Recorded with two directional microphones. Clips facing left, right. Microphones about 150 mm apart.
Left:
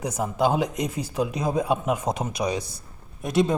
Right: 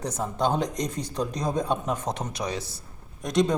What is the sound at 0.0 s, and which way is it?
A man's voice, 10° left (ahead or behind).